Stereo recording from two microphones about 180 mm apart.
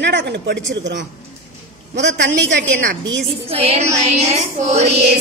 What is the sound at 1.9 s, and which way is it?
Speech, 80° right.